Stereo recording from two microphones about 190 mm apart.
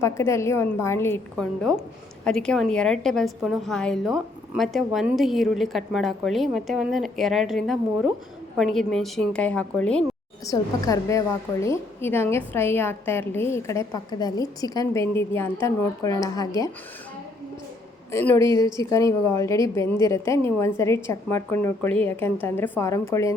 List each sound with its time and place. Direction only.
0.0 s a woman's voice: 15° left (ahead or behind)
10.4 s a woman's voice: 20° left (ahead or behind)
18.1 s a woman's voice: 15° left (ahead or behind)